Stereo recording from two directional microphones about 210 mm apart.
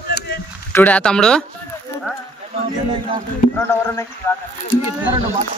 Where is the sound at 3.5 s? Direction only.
15° left (ahead or behind).